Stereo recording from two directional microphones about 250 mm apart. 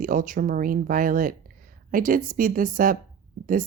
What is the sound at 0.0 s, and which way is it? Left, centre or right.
Speech, right.